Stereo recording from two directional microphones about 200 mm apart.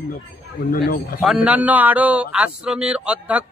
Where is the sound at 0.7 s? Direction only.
45° left (ahead or behind).